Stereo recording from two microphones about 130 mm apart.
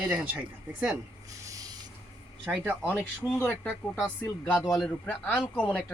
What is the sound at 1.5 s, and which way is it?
Rub, 30° right (ahead or behind).